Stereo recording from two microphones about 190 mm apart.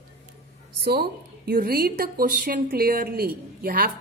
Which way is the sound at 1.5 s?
50° right (ahead or behind).